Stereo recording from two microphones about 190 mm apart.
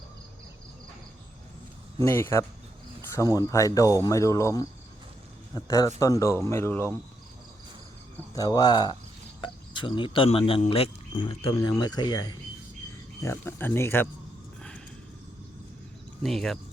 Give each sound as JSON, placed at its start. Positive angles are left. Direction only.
{"t": 2.0, "sound": "speech", "side_deg": 15}
{"t": 8.4, "sound": "speech", "side_deg": 20}
{"t": 16.2, "sound": "speech", "side_deg": 0}